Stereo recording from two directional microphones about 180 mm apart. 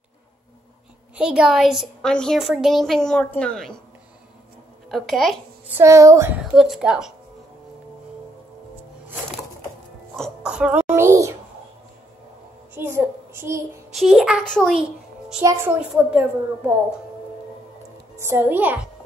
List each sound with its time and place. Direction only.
1.1 s a woman's voice: 5° right (ahead or behind)
4.9 s a woman's voice: centre (ahead or behind)
5.8 s a woman's voice: 15° right (ahead or behind)
6.4 s a woman's voice: centre (ahead or behind)
10.1 s a sound: centre (ahead or behind)
12.7 s a sound: 15° right (ahead or behind)
13.9 s a woman's voice: centre (ahead or behind)
15.4 s a woman's voice: 15° right (ahead or behind)
18.1 s a child's voice: 15° right (ahead or behind)